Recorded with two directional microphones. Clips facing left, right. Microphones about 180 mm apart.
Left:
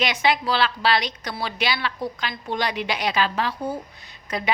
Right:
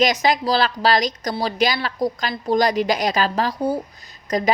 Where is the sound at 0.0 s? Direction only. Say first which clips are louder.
Right 4 dB; 40° right (ahead or behind).